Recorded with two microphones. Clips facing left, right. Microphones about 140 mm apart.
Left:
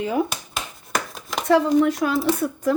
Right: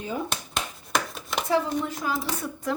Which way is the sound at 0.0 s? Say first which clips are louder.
Left 8 dB; 80° left.